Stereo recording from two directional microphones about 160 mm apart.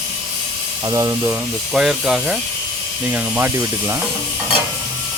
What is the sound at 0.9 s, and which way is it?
Speech, 25° right (ahead or behind).